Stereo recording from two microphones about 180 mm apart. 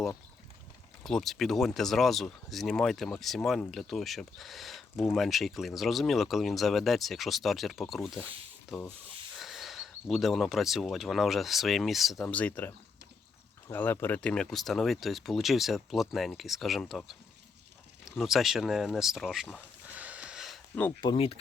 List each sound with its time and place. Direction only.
1.0 s speech: centre (ahead or behind)
9.4 s speech: centre (ahead or behind)
18.2 s speech: centre (ahead or behind)
19.5 s a sound: 10° right (ahead or behind)
21.0 s speech: 30° left (ahead or behind)